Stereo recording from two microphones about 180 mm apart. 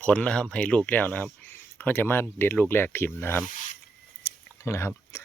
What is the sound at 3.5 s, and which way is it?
Speech, 45° left (ahead or behind).